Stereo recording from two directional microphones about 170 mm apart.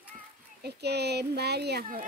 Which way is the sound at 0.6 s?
70° right (ahead or behind).